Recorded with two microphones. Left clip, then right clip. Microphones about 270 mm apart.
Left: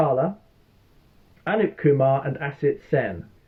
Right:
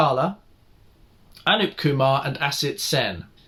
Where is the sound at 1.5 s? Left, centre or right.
Right.